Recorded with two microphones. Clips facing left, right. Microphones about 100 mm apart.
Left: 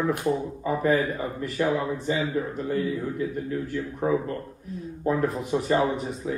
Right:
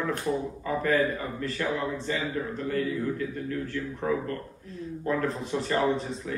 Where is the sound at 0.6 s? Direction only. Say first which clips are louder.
Left 2 dB; 20° left (ahead or behind).